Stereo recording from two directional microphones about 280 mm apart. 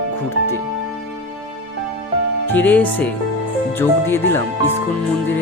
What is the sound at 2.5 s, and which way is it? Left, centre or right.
Speech, centre.